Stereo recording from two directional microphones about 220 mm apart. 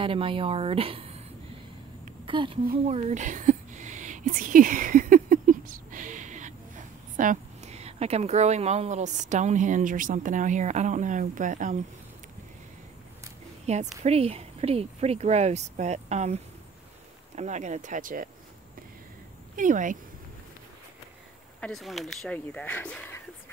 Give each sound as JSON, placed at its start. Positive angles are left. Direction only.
{"t": 0.0, "sound": "speech", "side_deg": -25}
{"t": 2.2, "sound": "a woman's voice", "side_deg": -25}
{"t": 13.7, "sound": "speech", "side_deg": -30}
{"t": 17.4, "sound": "speech", "side_deg": -35}
{"t": 19.5, "sound": "speech", "side_deg": -35}
{"t": 21.5, "sound": "speech", "side_deg": 0}